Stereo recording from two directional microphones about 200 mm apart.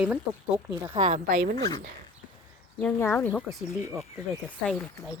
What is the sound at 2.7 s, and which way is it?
Speech, 10° left (ahead or behind).